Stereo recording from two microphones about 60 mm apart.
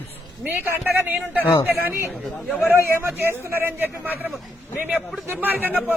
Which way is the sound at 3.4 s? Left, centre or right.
Right.